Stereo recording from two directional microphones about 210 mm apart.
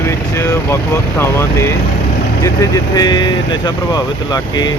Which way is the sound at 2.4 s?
20° left (ahead or behind).